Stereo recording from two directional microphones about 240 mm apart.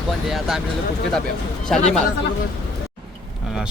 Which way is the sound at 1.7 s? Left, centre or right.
Centre.